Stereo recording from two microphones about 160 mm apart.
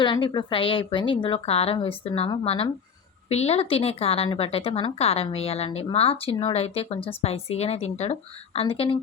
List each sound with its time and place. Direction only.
0.0 s speech: 30° left (ahead or behind)